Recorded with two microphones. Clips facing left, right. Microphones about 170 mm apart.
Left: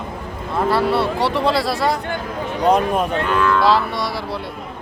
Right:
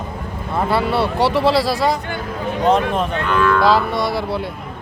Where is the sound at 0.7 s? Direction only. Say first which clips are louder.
Left 1 dB; centre (ahead or behind).